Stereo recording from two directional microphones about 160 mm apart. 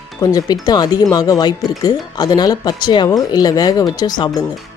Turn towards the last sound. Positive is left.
turn(degrees=25)  # may be behind; listen again after turning